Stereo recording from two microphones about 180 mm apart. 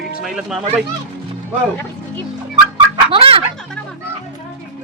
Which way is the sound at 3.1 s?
30° right (ahead or behind).